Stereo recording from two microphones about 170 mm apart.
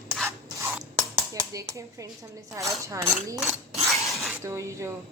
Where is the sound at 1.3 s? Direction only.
20° right (ahead or behind).